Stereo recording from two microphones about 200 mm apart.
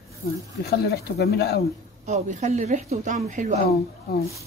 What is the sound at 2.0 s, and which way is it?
Speech, 35° right (ahead or behind).